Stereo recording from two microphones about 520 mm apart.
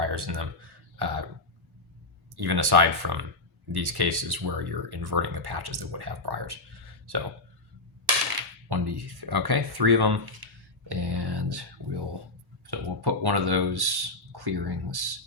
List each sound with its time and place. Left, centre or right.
0.0 s speech: right
0.9 s throat clearing: right
2.3 s speech: right
8.7 s speech: right